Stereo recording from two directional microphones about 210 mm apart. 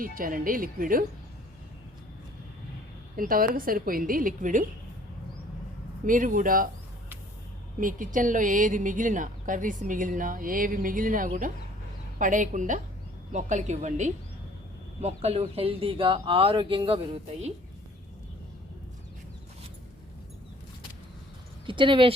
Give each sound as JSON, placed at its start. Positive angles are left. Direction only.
{"t": 0.0, "sound": "a woman's voice", "side_deg": -40}
{"t": 3.2, "sound": "a woman's voice", "side_deg": -40}
{"t": 6.1, "sound": "a woman's voice", "side_deg": -40}
{"t": 7.8, "sound": "a woman's voice", "side_deg": -40}
{"t": 21.7, "sound": "speech", "side_deg": -25}